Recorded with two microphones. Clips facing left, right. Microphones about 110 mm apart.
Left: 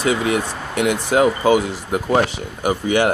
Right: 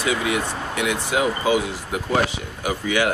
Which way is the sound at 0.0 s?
35° left (ahead or behind).